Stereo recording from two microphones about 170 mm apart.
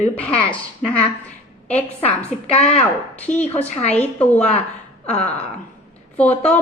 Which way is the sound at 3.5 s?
40° left (ahead or behind).